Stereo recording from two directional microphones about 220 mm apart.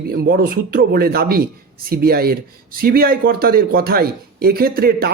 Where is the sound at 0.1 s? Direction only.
45° right (ahead or behind).